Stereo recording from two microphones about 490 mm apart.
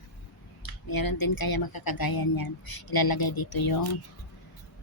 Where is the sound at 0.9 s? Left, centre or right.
Left.